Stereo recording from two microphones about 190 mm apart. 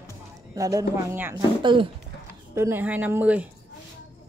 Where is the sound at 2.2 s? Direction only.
15° right (ahead or behind).